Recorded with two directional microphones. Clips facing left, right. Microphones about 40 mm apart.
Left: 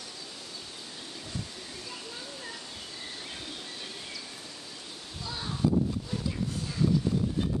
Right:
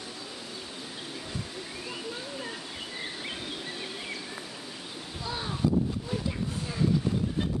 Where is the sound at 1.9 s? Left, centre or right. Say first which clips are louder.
Right 6 dB; centre.